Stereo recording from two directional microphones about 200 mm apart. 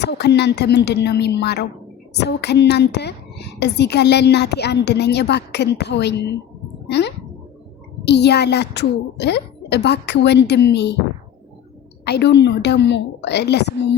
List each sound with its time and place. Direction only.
0.0 s a woman's voice: 55° left (ahead or behind)
12.0 s a woman's voice: 55° left (ahead or behind)